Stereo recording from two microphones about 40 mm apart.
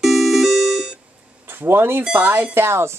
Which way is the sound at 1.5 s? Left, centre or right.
Right.